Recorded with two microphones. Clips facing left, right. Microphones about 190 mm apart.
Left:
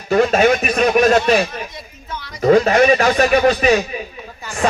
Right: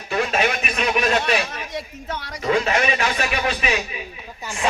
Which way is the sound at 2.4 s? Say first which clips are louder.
Left 9 dB; 40° left (ahead or behind).